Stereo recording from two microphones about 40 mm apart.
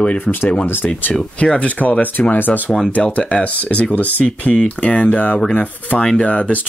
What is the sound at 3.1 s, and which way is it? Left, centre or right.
Speech, left.